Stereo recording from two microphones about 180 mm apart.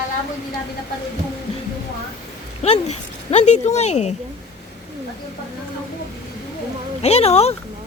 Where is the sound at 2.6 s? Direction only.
35° left (ahead or behind).